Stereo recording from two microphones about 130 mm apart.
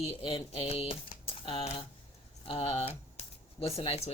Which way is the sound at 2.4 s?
50° left (ahead or behind).